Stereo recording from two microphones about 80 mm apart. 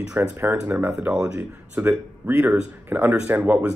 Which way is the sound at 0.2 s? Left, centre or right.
Right.